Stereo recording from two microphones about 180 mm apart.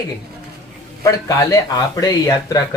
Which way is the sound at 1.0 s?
20° left (ahead or behind).